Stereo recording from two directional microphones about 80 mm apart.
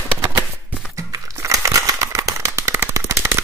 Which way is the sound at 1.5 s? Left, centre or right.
Right.